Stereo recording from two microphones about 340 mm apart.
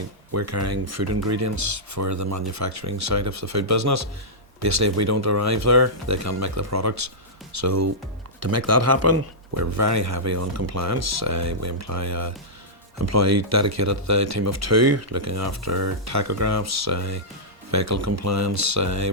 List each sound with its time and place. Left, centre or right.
0.3 s speech: right